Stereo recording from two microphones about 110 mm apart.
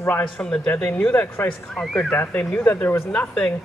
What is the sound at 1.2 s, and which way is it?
Speech, 20° left (ahead or behind).